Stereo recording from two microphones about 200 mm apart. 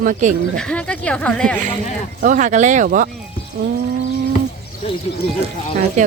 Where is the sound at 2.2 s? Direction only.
40° right (ahead or behind).